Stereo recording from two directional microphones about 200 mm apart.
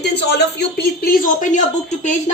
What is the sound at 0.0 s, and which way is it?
A woman's voice, 55° left (ahead or behind).